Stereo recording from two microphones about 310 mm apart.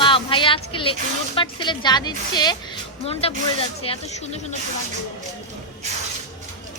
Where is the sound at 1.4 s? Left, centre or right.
Centre.